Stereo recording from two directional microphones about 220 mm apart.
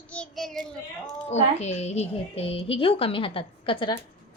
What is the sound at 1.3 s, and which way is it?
A woman's voice, 30° left (ahead or behind).